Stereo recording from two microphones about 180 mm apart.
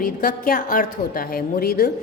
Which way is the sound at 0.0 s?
50° left (ahead or behind).